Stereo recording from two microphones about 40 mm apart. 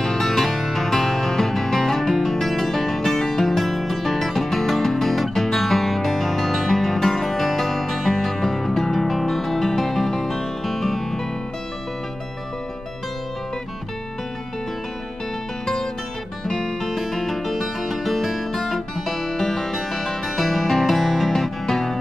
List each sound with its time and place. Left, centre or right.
0.0 s music: centre
15.6 s music: centre